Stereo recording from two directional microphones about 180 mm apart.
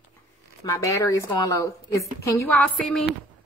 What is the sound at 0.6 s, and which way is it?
Speech, 20° left (ahead or behind).